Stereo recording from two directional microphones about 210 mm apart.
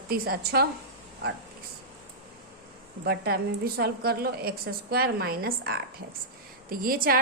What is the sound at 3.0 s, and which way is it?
A woman's voice, 50° right (ahead or behind).